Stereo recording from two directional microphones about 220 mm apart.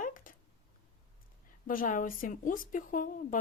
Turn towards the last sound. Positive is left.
turn(degrees=35)  # may be behind; listen again after turning